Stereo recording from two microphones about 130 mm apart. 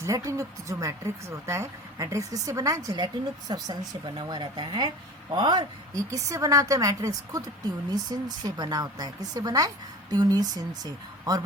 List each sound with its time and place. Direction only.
0.0 s a woman's voice: 25° right (ahead or behind)